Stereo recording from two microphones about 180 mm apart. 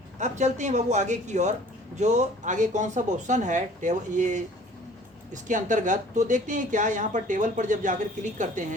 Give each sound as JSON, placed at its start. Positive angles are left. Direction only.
{"t": 0.2, "sound": "a woman's voice", "side_deg": -40}